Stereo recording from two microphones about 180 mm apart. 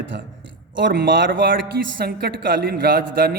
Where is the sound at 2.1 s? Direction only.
65° right (ahead or behind).